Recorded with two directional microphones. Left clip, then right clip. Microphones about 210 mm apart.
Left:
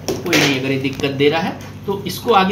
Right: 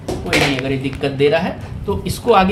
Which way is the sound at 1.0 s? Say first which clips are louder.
Right 1 dB; 30° right (ahead or behind).